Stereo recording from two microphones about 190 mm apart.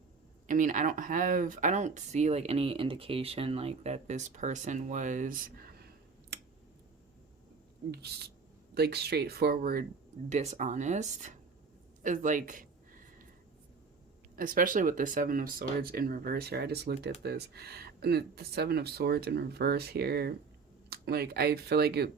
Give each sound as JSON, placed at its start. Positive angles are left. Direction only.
{"t": 0.4, "sound": "speech", "side_deg": -45}
{"t": 7.9, "sound": "speech", "side_deg": -60}
{"t": 10.2, "sound": "speech", "side_deg": -35}
{"t": 14.3, "sound": "speech", "side_deg": -45}